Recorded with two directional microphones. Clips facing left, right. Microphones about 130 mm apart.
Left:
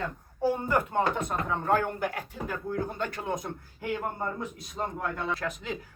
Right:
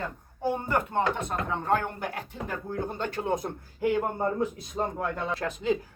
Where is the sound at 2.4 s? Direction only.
30° right (ahead or behind).